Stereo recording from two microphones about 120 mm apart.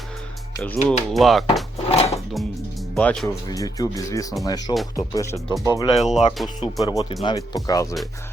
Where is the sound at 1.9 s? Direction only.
60° left (ahead or behind).